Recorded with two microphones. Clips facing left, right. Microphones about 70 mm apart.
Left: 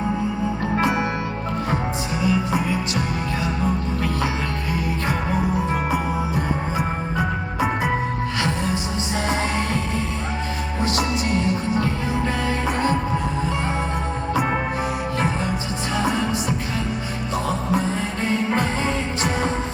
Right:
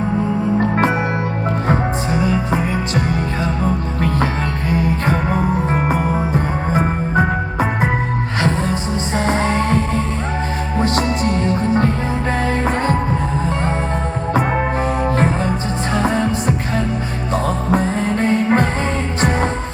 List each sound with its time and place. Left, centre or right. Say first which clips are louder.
2.2 s music: left 1 dB; right
5.7 s music: right 5 dB; right
16.0 s music: right 4 dB; right